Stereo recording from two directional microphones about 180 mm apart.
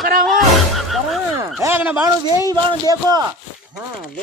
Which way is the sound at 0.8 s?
Centre (ahead or behind).